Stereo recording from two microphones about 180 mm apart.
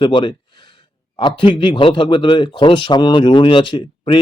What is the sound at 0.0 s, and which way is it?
A man's voice, 25° left (ahead or behind).